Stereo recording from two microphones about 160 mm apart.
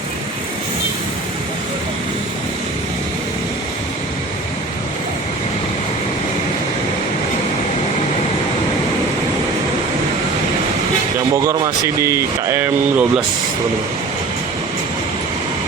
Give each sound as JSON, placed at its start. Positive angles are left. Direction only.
{"t": 11.4, "sound": "speech", "side_deg": -20}